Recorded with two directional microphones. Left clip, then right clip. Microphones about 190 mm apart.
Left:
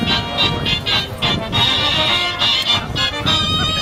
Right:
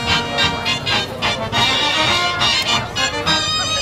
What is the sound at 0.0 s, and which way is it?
Music, 10° right (ahead or behind).